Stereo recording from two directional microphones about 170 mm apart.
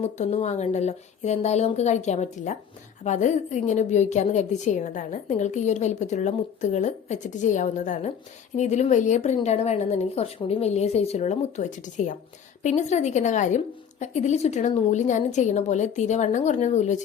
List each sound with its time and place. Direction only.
0.2 s a woman's voice: 40° left (ahead or behind)